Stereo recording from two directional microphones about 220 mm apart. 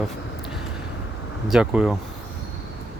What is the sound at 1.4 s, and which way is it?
Speech, 5° right (ahead or behind).